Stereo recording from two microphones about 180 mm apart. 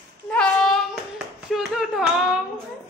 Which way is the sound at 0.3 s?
5° left (ahead or behind).